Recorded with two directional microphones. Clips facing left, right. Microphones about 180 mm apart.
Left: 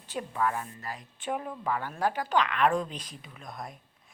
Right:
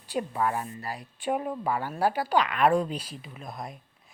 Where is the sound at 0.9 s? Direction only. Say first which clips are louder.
Right 4 dB; 10° right (ahead or behind).